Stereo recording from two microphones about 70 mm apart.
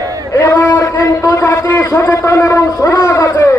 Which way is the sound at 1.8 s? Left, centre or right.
Left.